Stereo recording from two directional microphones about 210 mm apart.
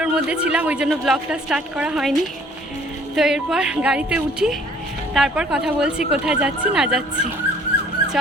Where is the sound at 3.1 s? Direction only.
5° right (ahead or behind).